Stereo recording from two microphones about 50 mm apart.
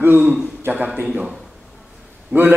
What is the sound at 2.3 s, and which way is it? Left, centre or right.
Speech, right.